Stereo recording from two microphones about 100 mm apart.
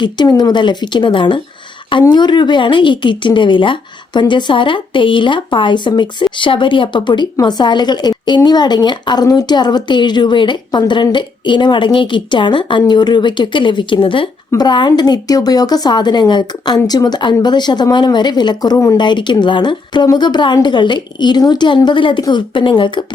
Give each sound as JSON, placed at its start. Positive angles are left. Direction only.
{"t": 0.3, "sound": "a woman's voice", "side_deg": 45}
{"t": 14.6, "sound": "a woman's voice", "side_deg": 50}